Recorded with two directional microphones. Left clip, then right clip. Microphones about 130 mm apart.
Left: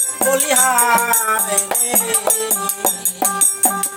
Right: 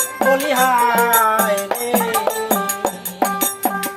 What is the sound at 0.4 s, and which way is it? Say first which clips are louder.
Music: right 1 dB; 30° left (ahead or behind).